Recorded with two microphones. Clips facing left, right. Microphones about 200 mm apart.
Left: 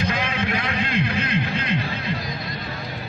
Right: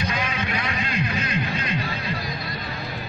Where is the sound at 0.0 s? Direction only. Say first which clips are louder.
Left 3 dB; 55° left (ahead or behind).